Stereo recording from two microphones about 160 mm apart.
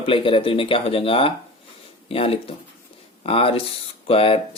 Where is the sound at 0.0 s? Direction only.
35° left (ahead or behind).